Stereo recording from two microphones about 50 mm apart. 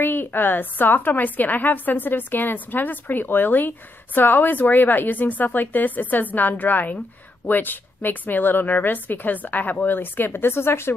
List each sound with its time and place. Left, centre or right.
0.0 s a woman's voice: left